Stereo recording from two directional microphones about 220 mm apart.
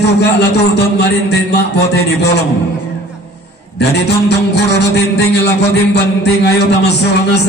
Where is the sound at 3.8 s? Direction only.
50° left (ahead or behind).